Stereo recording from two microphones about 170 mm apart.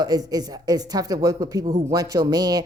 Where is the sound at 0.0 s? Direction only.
25° right (ahead or behind).